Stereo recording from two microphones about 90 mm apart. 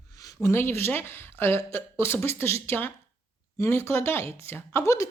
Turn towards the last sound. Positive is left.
turn(degrees=35)  # may be behind; listen again after turning